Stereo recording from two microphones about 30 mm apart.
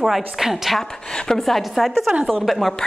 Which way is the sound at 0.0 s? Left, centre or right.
Centre.